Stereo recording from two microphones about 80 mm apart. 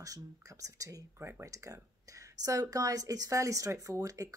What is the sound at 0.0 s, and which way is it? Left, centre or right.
Speech, right.